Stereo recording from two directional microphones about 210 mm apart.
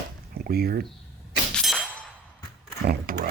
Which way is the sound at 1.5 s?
Centre (ahead or behind).